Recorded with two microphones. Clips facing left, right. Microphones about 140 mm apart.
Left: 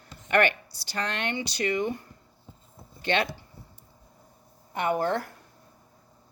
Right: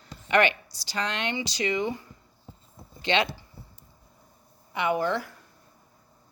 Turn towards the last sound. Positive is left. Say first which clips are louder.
# even
turn(degrees=50)  # may be behind; listen again after turning